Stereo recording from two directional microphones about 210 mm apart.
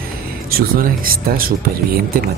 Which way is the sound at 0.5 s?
45° right (ahead or behind).